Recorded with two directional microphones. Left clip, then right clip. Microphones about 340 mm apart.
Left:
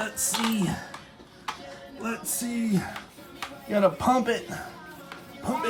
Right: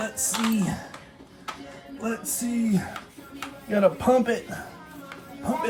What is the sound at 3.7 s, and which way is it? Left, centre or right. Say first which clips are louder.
Speech: right 2 dB; centre.